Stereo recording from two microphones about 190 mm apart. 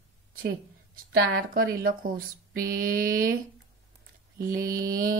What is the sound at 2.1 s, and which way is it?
Speech, 45° right (ahead or behind).